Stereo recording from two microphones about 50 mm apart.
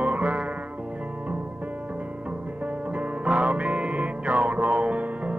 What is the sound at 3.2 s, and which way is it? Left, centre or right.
Music, right.